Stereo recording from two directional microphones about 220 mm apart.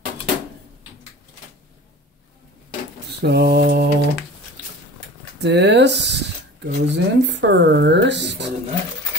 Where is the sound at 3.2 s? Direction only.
50° right (ahead or behind).